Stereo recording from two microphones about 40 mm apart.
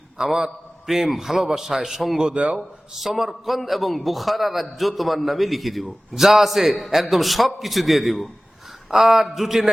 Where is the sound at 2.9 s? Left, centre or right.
Centre.